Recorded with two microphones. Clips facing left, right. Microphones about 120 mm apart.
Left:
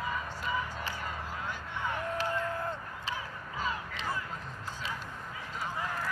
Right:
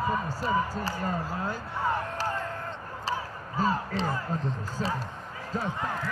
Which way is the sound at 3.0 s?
40° right (ahead or behind).